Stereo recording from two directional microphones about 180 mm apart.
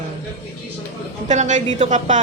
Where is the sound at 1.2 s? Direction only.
40° right (ahead or behind).